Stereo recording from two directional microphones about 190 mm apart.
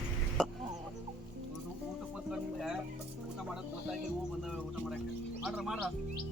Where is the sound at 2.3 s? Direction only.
Centre (ahead or behind).